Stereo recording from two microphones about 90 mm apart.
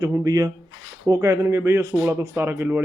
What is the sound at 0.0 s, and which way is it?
A man's voice, 45° right (ahead or behind).